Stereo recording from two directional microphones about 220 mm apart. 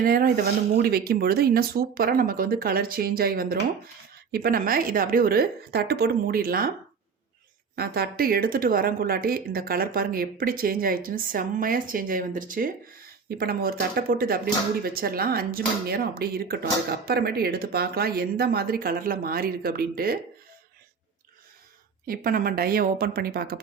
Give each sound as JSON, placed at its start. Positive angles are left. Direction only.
{"t": 0.0, "sound": "a woman's voice", "side_deg": -40}
{"t": 7.8, "sound": "a woman's voice", "side_deg": -45}
{"t": 22.0, "sound": "speech", "side_deg": -40}